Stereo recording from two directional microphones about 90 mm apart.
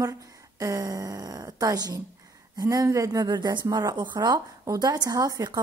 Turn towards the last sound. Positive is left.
turn(degrees=-45)  # may be behind; listen again after turning